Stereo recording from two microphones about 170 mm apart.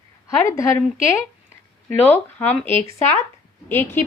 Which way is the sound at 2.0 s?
10° left (ahead or behind).